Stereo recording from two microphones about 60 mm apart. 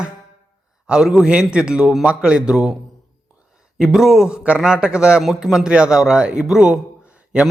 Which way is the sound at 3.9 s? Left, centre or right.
Centre.